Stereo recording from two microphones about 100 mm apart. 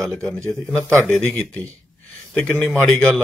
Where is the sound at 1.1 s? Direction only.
20° left (ahead or behind).